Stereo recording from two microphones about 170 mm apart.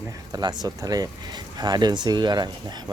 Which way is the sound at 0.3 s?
25° right (ahead or behind).